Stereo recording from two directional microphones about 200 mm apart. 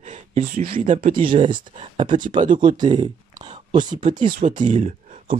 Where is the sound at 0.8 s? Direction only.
35° right (ahead or behind).